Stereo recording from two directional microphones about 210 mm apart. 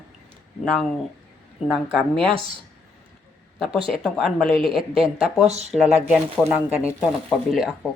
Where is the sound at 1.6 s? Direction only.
Centre (ahead or behind).